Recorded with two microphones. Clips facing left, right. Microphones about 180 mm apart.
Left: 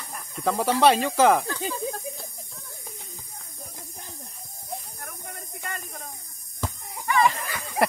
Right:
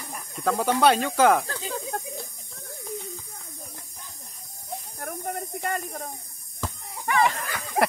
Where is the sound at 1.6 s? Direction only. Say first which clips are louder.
Left 1 dB; 60° right (ahead or behind).